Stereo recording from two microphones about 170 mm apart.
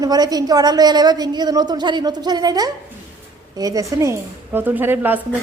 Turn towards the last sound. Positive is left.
turn(degrees=-10)  # may be behind; listen again after turning